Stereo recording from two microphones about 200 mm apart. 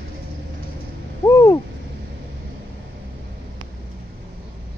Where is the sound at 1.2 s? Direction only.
15° left (ahead or behind).